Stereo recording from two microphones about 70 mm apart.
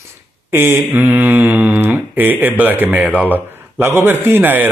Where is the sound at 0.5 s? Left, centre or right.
Right.